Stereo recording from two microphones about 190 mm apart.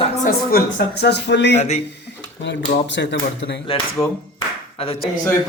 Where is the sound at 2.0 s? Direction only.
65° left (ahead or behind).